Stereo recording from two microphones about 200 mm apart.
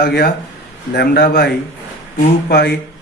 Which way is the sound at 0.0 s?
50° left (ahead or behind).